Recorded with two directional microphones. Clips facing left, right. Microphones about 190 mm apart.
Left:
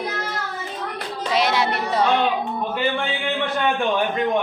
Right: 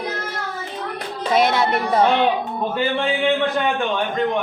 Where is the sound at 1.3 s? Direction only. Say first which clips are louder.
Right 3 dB; 50° right (ahead or behind).